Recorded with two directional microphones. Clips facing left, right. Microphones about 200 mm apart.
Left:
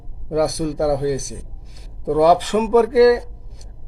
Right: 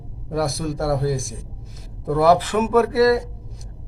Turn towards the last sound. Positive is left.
turn(degrees=15)  # may be behind; listen again after turning